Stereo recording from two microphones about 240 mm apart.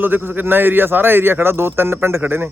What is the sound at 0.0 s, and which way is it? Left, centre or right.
Speech, centre.